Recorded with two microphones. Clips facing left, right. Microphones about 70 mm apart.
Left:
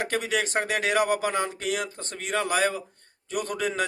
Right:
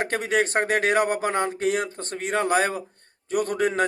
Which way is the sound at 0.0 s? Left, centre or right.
Right.